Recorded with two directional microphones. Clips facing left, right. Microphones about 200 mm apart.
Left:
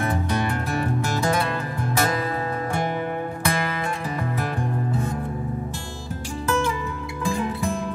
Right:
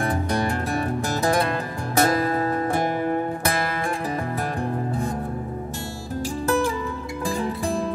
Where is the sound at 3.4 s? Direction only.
40° right (ahead or behind).